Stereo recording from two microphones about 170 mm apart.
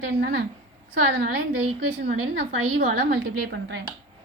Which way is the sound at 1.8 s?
70° right (ahead or behind).